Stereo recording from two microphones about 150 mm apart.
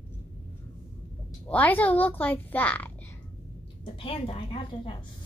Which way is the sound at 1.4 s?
10° left (ahead or behind).